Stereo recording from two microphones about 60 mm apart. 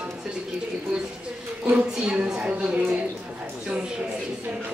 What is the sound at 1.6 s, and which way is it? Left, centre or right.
Speech, centre.